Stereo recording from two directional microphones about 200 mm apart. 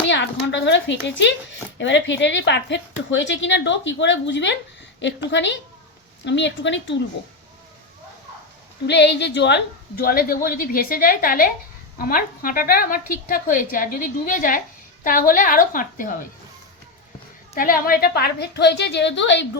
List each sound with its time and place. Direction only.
0.0 s speech: 65° left (ahead or behind)
8.9 s a woman's voice: 60° left (ahead or behind); by 16.1 s 40° left (ahead or behind)
17.5 s speech: 45° left (ahead or behind); by 19.5 s 65° left (ahead or behind)